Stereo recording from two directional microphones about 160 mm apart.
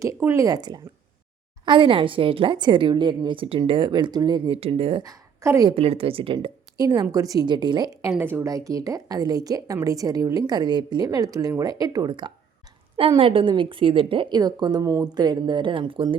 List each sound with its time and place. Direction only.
0.0 s a woman's voice: 15° right (ahead or behind)
5.4 s a woman's voice: 20° right (ahead or behind)
5.6 s a woman's voice: 40° right (ahead or behind)